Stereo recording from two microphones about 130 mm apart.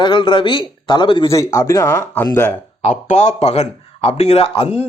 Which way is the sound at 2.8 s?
65° left (ahead or behind).